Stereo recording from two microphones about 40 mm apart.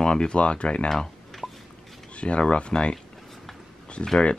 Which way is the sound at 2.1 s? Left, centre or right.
Left.